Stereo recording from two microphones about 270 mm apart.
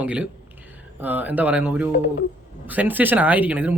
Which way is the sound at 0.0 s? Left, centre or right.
Centre.